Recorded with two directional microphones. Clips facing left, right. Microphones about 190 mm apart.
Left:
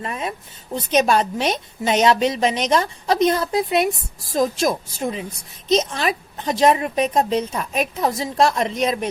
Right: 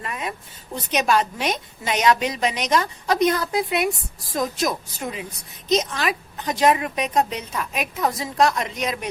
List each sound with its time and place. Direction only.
0.0 s a woman's voice: 30° left (ahead or behind)